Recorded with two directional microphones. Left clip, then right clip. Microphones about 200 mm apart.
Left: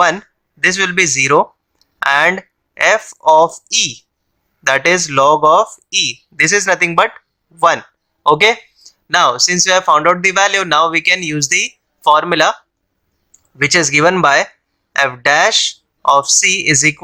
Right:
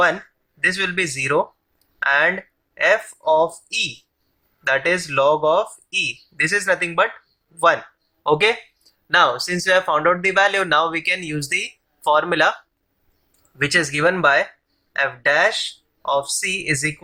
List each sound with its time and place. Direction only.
0.6 s speech: 35° left (ahead or behind)
8.2 s a sound: 30° left (ahead or behind)
9.4 s speech: 35° left (ahead or behind)
13.6 s speech: 30° left (ahead or behind)